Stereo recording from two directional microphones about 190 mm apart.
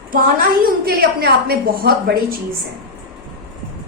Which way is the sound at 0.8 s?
55° right (ahead or behind).